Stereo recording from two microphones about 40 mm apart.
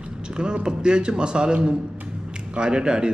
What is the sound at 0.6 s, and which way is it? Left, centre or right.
A man's voice, right.